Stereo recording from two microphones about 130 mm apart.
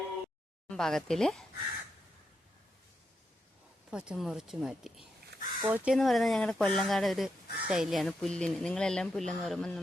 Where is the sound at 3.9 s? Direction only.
5° right (ahead or behind).